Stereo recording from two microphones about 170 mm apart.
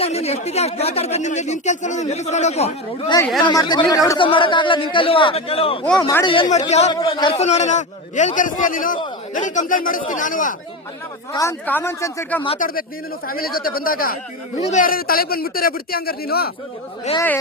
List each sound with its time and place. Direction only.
0.0 s speech: 40° left (ahead or behind)
3.4 s a man's voice: 25° left (ahead or behind)
5.8 s speech: 5° left (ahead or behind)
6.2 s a man's voice: 30° left (ahead or behind)
6.7 s speech: 40° left (ahead or behind)
6.9 s a man's voice: 30° left (ahead or behind); by 10.5 s 50° left (ahead or behind)
11.3 s speech: 15° left (ahead or behind)
12.5 s speech: 55° left (ahead or behind)
14.6 s speech: 45° left (ahead or behind); by 16.5 s 65° left (ahead or behind)
17.1 s speech: 40° left (ahead or behind)